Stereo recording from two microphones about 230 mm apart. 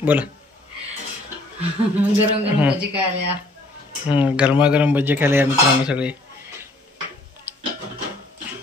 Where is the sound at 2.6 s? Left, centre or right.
Centre.